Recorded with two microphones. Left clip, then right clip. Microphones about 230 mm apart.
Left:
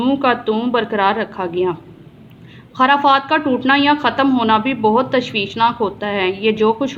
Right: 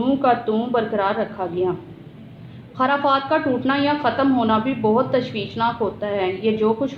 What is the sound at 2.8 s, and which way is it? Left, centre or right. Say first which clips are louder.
A woman's voice: left 6 dB; left.